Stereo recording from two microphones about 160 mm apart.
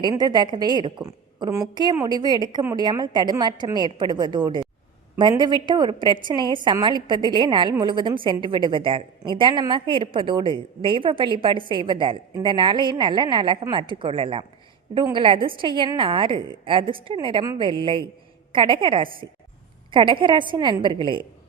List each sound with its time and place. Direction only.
0.0 s a woman's voice: 25° right (ahead or behind)